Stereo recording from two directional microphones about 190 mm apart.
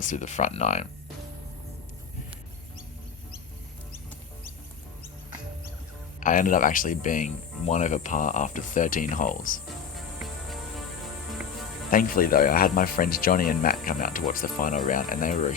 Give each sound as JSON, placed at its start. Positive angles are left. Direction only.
{"t": 0.0, "sound": "speech", "side_deg": 40}
{"t": 6.1, "sound": "speech", "side_deg": 45}
{"t": 10.2, "sound": "music", "side_deg": 0}
{"t": 11.9, "sound": "speech", "side_deg": 50}